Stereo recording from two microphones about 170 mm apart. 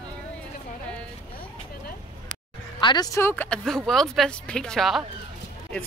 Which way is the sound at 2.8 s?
25° left (ahead or behind).